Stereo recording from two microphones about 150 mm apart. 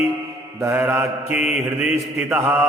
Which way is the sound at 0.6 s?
15° right (ahead or behind).